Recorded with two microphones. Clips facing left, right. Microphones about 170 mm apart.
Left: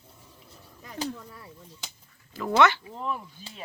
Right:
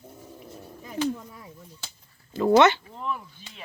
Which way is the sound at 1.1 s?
15° right (ahead or behind).